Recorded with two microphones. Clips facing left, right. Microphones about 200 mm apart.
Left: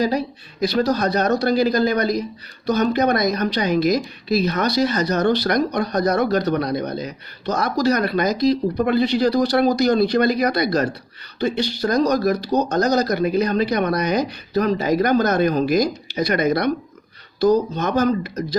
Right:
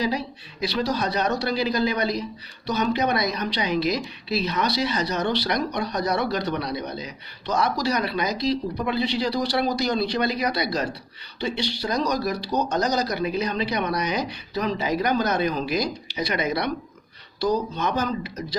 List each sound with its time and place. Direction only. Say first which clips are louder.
0.0 s a woman's voice: left 5 dB; 45° left (ahead or behind)